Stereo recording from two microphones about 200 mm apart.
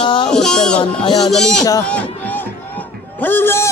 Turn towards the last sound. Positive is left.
turn(degrees=10)  # may be behind; listen again after turning